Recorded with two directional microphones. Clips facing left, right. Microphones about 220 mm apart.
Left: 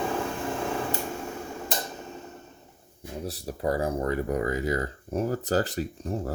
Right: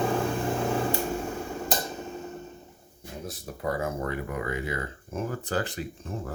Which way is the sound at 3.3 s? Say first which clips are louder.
Left 3 dB; 35° left (ahead or behind).